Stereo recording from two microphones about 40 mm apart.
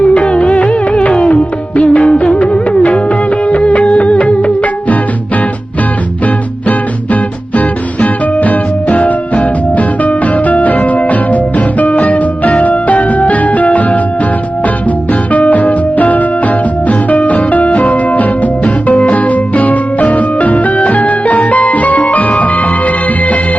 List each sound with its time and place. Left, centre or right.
0.0 s music: left
6.7 s music: left
15.3 s music: left